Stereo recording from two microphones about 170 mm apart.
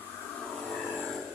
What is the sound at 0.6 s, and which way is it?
Vehicle, 5° left (ahead or behind).